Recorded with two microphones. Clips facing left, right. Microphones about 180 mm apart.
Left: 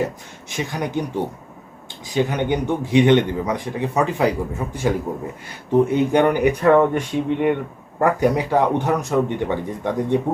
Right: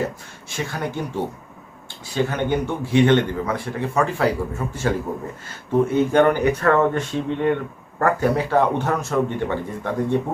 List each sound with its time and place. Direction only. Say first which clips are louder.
0.5 s speech: left 3 dB; 15° left (ahead or behind)
2.0 s speech: left 2 dB; 15° left (ahead or behind)